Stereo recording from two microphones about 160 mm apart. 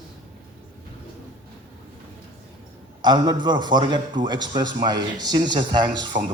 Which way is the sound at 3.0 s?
25° right (ahead or behind).